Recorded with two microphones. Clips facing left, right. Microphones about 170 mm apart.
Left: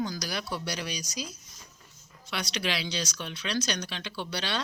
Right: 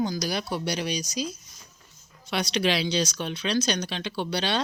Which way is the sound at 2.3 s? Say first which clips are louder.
Right 7 dB; 25° right (ahead or behind).